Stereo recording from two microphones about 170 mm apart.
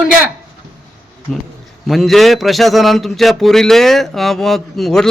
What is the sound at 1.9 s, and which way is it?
A man's voice, centre (ahead or behind).